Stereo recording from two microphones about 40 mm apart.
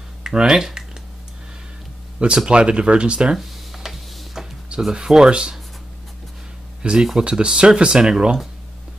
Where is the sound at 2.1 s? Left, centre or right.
Right.